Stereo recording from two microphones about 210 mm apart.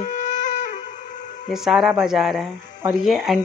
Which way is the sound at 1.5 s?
Centre (ahead or behind).